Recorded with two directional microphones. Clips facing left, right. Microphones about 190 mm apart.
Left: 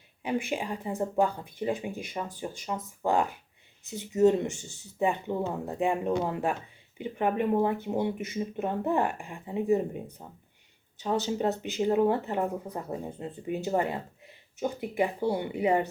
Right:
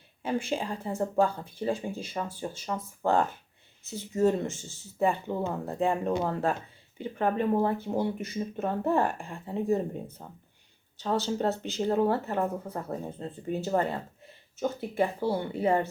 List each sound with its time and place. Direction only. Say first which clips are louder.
0.2 s speech: even; 15° left (ahead or behind)